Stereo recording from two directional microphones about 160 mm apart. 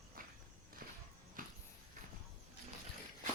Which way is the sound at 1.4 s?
60° right (ahead or behind).